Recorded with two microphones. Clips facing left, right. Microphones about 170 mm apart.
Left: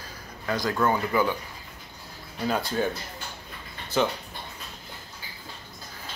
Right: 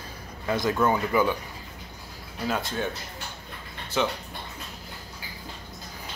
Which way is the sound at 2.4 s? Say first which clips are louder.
Left 2 dB; centre (ahead or behind).